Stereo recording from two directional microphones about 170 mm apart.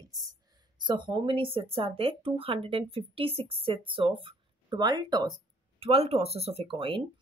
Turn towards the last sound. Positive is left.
turn(degrees=-30)  # may be behind; listen again after turning